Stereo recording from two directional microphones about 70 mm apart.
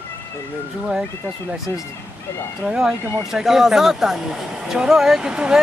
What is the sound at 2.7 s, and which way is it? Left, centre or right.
Speech, centre.